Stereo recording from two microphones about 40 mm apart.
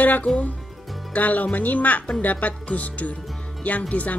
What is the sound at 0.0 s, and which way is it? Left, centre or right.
A woman's voice, left.